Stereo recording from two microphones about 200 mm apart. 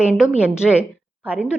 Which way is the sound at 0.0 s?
5° right (ahead or behind).